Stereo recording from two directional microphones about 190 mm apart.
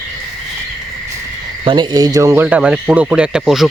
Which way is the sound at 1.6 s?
25° right (ahead or behind).